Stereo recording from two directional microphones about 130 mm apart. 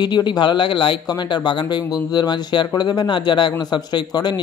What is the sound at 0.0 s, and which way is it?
Speech, 35° left (ahead or behind).